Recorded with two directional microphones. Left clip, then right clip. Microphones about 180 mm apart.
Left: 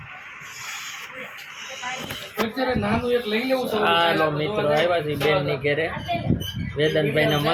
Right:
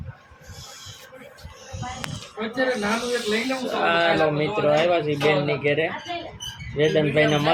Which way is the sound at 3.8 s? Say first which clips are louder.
Even; centre (ahead or behind).